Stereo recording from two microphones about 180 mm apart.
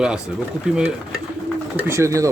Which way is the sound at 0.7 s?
5° right (ahead or behind).